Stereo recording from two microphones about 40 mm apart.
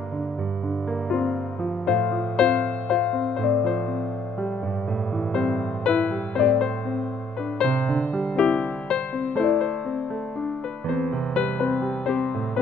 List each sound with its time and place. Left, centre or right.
1.9 s music: left
5.3 s music: left
10.9 s music: left